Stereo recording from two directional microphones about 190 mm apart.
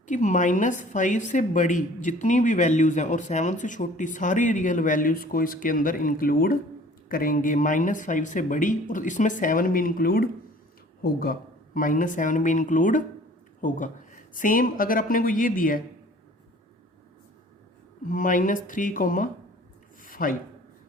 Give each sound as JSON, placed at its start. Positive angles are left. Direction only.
{"t": 0.1, "sound": "a woman's voice", "side_deg": 40}
{"t": 18.0, "sound": "speech", "side_deg": 45}
{"t": 20.1, "sound": "a sound", "side_deg": 45}